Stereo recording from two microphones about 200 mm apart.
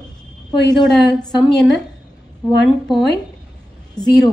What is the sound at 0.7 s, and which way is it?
A woman's voice, 5° left (ahead or behind).